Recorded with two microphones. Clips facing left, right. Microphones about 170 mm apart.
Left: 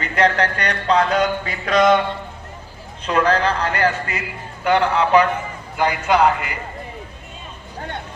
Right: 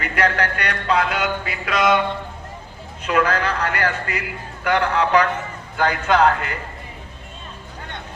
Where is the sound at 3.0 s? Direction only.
35° left (ahead or behind); by 6.5 s 15° left (ahead or behind).